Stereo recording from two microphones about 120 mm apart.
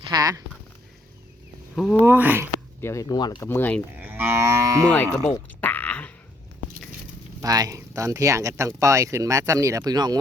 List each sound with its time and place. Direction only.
0.1 s speech: 30° right (ahead or behind)
1.7 s speech: 5° left (ahead or behind)
2.0 s speech: 15° right (ahead or behind)
2.8 s speech: 25° left (ahead or behind)
3.4 s speech: 15° left (ahead or behind)
3.9 s speech: 15° right (ahead or behind)
4.9 s speech: 15° left (ahead or behind)
5.5 s a sound: 15° left (ahead or behind)
7.4 s speech: 30° right (ahead or behind)